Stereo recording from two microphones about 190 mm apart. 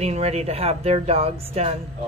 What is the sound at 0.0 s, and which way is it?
Speech, 35° right (ahead or behind).